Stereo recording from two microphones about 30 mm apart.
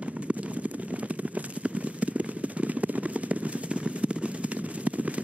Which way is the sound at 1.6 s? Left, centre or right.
Right.